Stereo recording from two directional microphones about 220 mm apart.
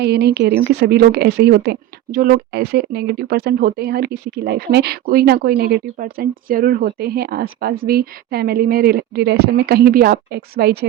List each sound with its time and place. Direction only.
0.0 s speech: 45° right (ahead or behind)